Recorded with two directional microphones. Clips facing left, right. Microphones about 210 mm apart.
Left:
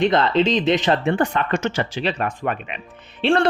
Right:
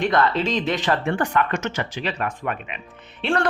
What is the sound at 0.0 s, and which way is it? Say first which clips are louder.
A man's voice: left 3 dB; 20° left (ahead or behind).